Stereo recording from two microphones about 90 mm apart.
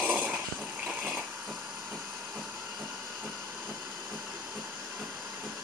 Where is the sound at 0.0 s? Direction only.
15° right (ahead or behind).